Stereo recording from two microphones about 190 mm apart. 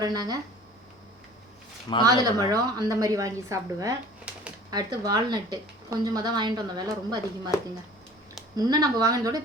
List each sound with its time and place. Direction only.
0.0 s speech: 20° right (ahead or behind)
1.9 s speech: 20° left (ahead or behind)
2.5 s a woman's voice: 20° right (ahead or behind)
4.3 s a sound: 5° right (ahead or behind)
4.7 s speech: 20° right (ahead or behind)
8.5 s speech: 20° right (ahead or behind)